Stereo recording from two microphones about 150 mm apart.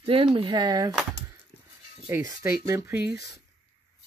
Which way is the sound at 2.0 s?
20° right (ahead or behind).